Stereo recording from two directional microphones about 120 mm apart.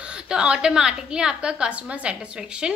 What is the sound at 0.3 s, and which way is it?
A woman's voice, 5° right (ahead or behind).